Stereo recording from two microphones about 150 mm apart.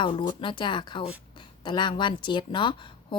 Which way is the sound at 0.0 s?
30° left (ahead or behind).